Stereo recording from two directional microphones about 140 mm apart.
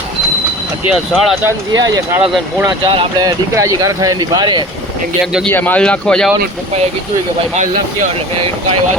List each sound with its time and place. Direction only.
0.9 s speech: centre (ahead or behind)
1.7 s speech: 30° right (ahead or behind)
2.1 s speech: 10° right (ahead or behind)
2.8 s speech: 40° right (ahead or behind)
3.2 s speech: 25° right (ahead or behind)
5.2 s speech: centre (ahead or behind)
5.5 s speech: 15° left (ahead or behind)